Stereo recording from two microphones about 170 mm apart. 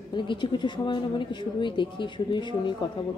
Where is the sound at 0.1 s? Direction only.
25° left (ahead or behind).